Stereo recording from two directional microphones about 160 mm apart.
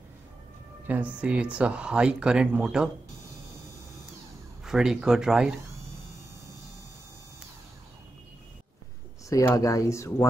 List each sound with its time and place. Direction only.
0.8 s speech: 10° right (ahead or behind)
4.6 s speech: 5° right (ahead or behind)
9.3 s speech: 20° left (ahead or behind)